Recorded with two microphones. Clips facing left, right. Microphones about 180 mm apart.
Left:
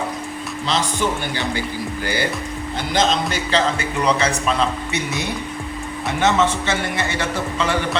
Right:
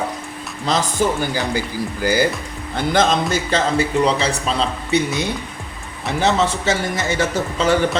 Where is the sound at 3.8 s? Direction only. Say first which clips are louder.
Right 2 dB; 30° right (ahead or behind).